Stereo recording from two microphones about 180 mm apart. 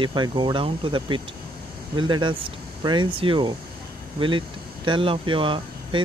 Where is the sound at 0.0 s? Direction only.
25° right (ahead or behind).